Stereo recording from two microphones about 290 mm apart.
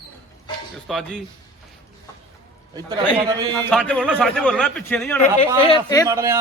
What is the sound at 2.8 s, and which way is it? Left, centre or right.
Speech, centre.